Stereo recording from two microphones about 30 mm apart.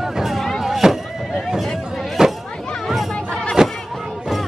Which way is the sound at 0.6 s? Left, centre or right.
Centre.